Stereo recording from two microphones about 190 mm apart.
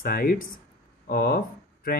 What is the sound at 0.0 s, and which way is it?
Speech, 50° left (ahead or behind).